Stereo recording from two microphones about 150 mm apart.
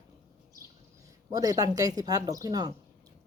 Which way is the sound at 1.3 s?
25° right (ahead or behind).